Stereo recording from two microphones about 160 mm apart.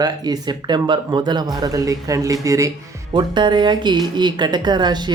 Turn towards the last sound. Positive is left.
turn(degrees=-25)  # may be behind; listen again after turning